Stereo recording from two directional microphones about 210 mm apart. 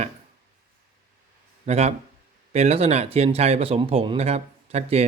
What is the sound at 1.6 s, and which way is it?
Speech, 30° right (ahead or behind).